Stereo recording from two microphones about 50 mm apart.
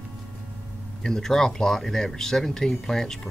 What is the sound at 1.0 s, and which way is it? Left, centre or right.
Speech, centre.